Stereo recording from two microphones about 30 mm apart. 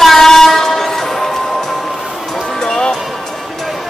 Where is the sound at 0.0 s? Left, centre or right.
Centre.